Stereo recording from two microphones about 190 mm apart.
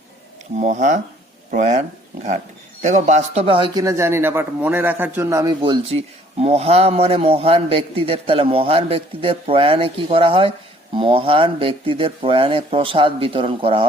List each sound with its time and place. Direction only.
0.6 s a man's voice: 40° right (ahead or behind)
2.8 s a man's voice: 40° right (ahead or behind)
3.8 s a man's voice: 15° right (ahead or behind)